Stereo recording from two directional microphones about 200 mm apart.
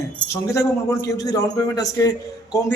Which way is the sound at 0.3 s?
15° left (ahead or behind).